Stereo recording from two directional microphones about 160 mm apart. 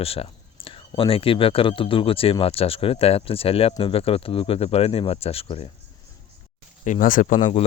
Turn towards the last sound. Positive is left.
turn(degrees=55)  # may be behind; listen again after turning